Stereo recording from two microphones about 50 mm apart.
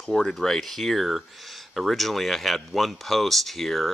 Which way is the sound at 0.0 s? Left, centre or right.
Centre.